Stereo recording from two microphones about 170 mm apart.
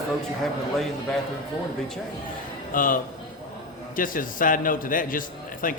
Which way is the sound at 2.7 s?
55° left (ahead or behind).